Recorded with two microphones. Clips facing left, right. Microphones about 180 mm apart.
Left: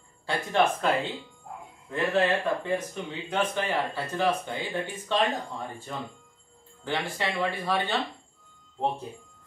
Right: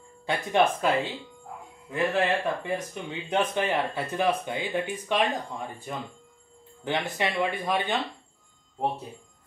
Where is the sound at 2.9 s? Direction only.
20° right (ahead or behind).